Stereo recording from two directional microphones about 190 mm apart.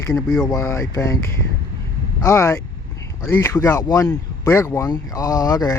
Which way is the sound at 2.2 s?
15° left (ahead or behind).